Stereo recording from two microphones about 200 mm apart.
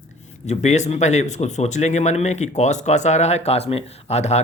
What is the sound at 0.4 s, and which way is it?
Speech, 35° left (ahead or behind).